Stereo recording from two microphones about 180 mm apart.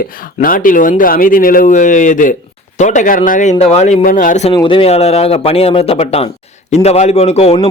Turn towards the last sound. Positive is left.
turn(degrees=35)  # may be behind; listen again after turning